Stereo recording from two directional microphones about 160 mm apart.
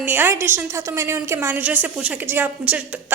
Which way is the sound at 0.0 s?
10° right (ahead or behind).